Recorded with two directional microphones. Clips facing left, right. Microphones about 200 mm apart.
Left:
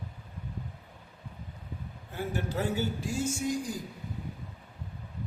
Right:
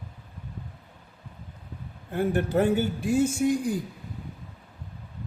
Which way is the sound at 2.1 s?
55° right (ahead or behind).